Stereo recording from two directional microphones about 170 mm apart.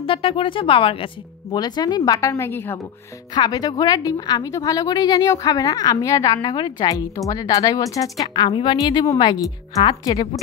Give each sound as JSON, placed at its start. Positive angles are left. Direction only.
{"t": 0.0, "sound": "a woman's voice", "side_deg": 30}